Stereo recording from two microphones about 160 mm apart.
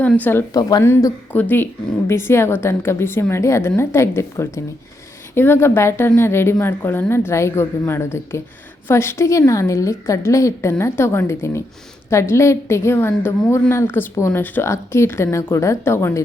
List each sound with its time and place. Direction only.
0.0 s a woman's voice: 10° left (ahead or behind)